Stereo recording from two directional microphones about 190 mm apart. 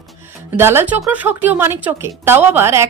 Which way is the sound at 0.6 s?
10° right (ahead or behind).